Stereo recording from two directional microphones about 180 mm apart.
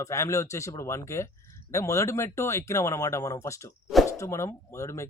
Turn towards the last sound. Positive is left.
turn(degrees=15)  # may be behind; listen again after turning